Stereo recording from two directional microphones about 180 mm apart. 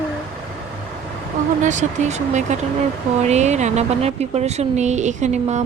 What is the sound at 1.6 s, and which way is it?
Speech, 40° right (ahead or behind).